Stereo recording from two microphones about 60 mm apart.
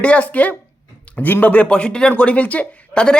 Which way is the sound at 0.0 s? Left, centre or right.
Left.